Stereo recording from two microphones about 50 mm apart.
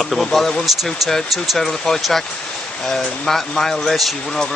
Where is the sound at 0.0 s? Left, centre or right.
Centre.